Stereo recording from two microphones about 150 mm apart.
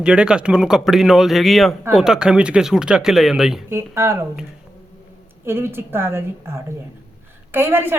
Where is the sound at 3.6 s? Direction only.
15° right (ahead or behind).